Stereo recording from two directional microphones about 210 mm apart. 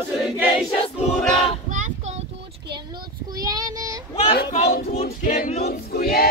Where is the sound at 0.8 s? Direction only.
30° left (ahead or behind).